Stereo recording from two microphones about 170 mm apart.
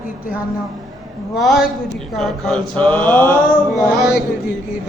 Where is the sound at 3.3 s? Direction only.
55° left (ahead or behind).